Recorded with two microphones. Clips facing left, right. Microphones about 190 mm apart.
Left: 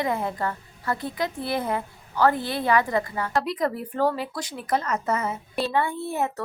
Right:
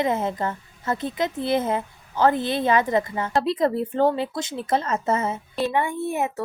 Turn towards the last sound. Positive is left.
turn(degrees=-15)  # may be behind; listen again after turning